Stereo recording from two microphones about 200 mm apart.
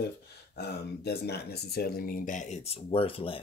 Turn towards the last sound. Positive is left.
turn(degrees=25)  # may be behind; listen again after turning